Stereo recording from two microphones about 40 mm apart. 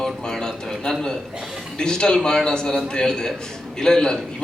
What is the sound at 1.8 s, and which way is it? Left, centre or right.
A man's voice, left.